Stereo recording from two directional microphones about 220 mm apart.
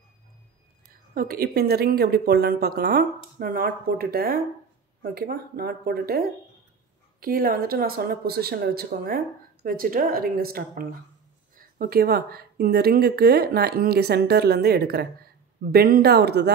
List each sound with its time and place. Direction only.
1.1 s speech: 40° right (ahead or behind)